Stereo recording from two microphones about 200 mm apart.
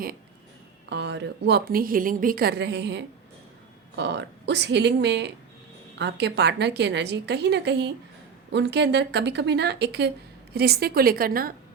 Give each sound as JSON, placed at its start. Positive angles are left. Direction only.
{"t": 0.9, "sound": "a woman's voice", "side_deg": -60}